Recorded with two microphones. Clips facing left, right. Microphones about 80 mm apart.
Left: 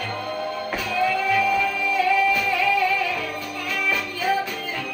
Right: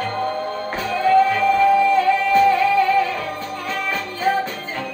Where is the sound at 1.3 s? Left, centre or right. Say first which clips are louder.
Right 6 dB; right.